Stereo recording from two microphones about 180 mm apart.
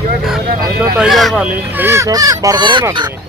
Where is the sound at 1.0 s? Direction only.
Centre (ahead or behind); by 3.1 s 25° right (ahead or behind).